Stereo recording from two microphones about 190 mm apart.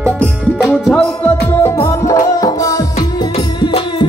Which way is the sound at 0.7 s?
5° left (ahead or behind).